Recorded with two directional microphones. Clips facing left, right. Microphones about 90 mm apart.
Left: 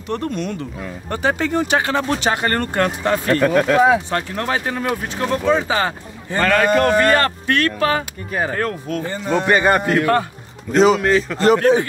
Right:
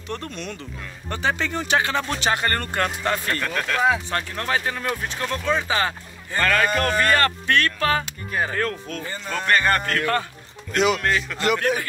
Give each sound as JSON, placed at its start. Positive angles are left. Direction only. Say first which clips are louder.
{"t": 0.1, "sound": "speech", "louder": "left 8 dB", "side_deg": 15}
{"t": 1.1, "sound": "speech", "louder": "left 5 dB", "side_deg": 45}
{"t": 1.6, "sound": "speech", "louder": "left 4 dB", "side_deg": 15}
{"t": 4.4, "sound": "a man's voice", "louder": "left 4 dB", "side_deg": 25}
{"t": 8.9, "sound": "speech", "louder": "left 9 dB", "side_deg": 15}
{"t": 10.7, "sound": "a man's voice", "louder": "left 7 dB", "side_deg": 35}
{"t": 11.0, "sound": "a man's voice", "louder": "left 7 dB", "side_deg": 0}
{"t": 11.3, "sound": "a man's voice", "louder": "left 11 dB", "side_deg": 35}